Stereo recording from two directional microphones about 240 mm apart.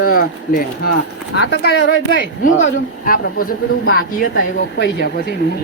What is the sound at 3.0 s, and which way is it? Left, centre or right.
Speech, left.